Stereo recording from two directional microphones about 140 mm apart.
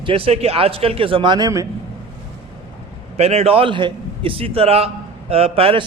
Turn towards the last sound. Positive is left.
turn(degrees=-45)  # may be behind; listen again after turning